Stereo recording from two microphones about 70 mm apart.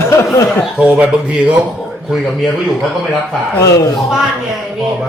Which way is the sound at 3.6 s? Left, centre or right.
Left.